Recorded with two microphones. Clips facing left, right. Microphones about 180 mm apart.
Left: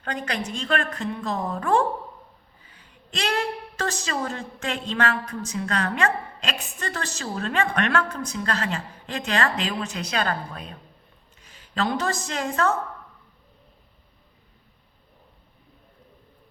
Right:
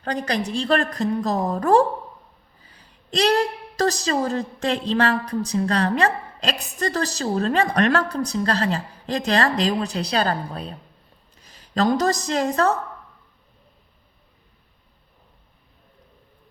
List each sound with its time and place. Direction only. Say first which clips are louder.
0.0 s a woman's voice: right 5 dB; 35° right (ahead or behind)